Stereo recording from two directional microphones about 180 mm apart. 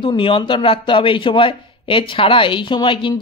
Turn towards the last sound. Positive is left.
turn(degrees=25)  # may be behind; listen again after turning